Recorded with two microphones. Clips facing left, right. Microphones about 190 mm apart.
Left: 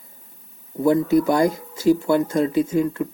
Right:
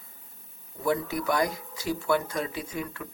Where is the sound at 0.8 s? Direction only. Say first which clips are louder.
Left 11 dB; 25° left (ahead or behind).